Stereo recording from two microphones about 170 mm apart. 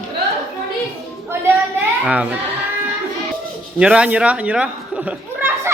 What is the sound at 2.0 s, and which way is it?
Speech, 10° right (ahead or behind).